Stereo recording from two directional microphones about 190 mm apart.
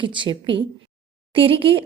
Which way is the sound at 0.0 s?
25° right (ahead or behind).